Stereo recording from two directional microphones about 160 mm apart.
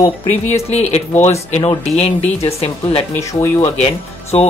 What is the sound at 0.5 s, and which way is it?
Speech, 45° left (ahead or behind).